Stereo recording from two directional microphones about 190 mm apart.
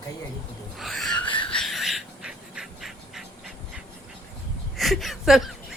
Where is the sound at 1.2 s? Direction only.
25° left (ahead or behind).